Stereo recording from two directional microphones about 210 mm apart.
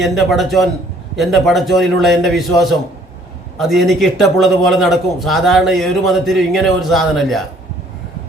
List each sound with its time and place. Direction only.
0.0 s a man's voice: centre (ahead or behind)